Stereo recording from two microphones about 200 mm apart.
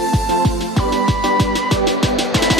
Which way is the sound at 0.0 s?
Centre (ahead or behind).